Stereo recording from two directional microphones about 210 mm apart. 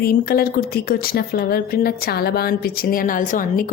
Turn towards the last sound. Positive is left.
turn(degrees=40)  # may be behind; listen again after turning